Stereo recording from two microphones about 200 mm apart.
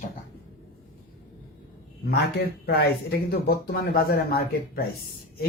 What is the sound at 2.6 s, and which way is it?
Speech, 50° left (ahead or behind).